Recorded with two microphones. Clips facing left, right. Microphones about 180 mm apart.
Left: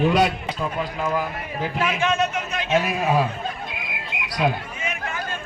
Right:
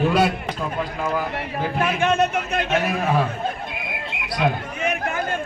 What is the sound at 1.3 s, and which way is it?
A man's voice, 55° right (ahead or behind).